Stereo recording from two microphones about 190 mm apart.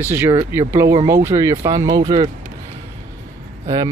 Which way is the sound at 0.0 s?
10° right (ahead or behind).